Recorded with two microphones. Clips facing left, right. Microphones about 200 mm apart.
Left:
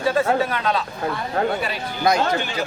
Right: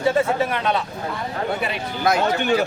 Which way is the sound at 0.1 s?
25° right (ahead or behind).